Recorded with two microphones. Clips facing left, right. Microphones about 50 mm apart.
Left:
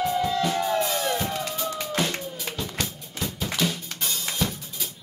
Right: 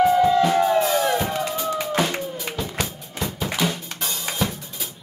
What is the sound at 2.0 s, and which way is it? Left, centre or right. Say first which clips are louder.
Music: right 4 dB; centre.